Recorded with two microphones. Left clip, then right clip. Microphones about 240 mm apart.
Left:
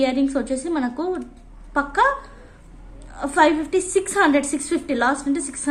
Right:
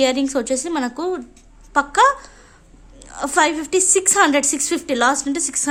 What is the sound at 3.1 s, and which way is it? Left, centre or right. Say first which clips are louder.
A woman's voice: even; right.